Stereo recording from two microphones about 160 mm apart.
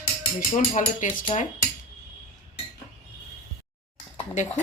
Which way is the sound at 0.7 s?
55° left (ahead or behind).